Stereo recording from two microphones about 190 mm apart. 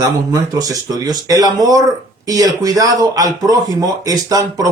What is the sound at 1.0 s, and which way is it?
Speech, 20° right (ahead or behind).